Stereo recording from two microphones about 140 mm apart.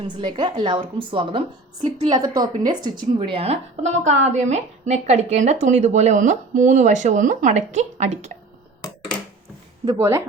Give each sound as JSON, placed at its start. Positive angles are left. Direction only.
{"t": 0.0, "sound": "a woman's voice", "side_deg": -35}
{"t": 2.0, "sound": "a woman's voice", "side_deg": -30}
{"t": 3.2, "sound": "a woman's voice", "side_deg": -45}
{"t": 10.0, "sound": "a woman's voice", "side_deg": -20}